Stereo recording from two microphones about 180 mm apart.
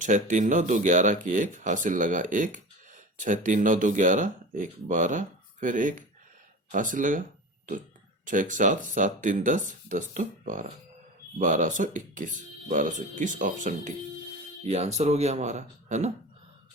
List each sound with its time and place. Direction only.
0.0 s speech: 45° right (ahead or behind)